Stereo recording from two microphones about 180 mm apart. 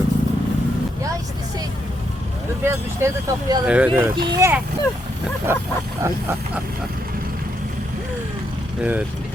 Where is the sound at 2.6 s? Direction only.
15° right (ahead or behind).